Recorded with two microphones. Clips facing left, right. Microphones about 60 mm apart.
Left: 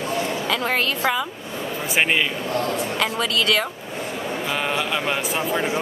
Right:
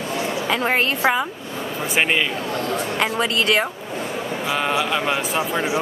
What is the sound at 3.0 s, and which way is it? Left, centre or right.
Speech, right.